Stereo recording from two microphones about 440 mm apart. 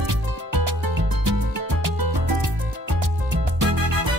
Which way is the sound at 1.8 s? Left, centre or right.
Right.